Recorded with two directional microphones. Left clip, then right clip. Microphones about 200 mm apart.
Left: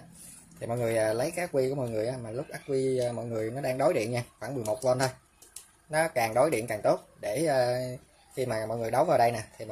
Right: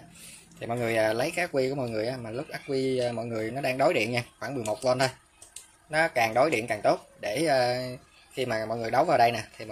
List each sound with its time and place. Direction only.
0.6 s speech: 5° left (ahead or behind)